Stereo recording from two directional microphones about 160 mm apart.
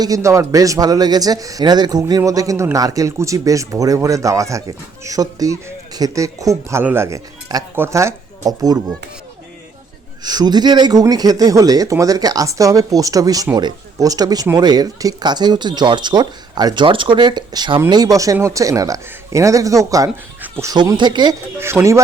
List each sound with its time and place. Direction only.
0.0 s speech: 20° right (ahead or behind)
10.2 s speech: 25° right (ahead or behind)
20.4 s dog: 15° right (ahead or behind)
21.0 s speech: 30° right (ahead or behind)
21.6 s speech: 15° right (ahead or behind)